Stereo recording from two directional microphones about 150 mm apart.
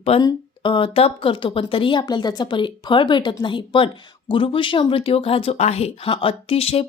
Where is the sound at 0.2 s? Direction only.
30° left (ahead or behind).